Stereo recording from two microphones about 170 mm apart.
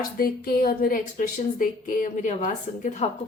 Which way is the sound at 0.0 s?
60° left (ahead or behind).